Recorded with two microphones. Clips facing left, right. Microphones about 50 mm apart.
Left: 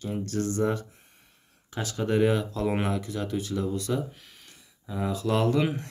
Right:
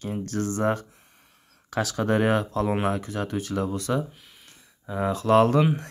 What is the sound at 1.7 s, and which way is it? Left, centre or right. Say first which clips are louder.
Speech: right 3 dB; right.